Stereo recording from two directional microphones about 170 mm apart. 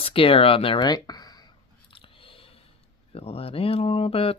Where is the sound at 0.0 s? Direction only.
35° left (ahead or behind).